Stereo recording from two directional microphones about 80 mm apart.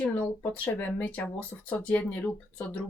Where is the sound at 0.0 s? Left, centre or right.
Centre.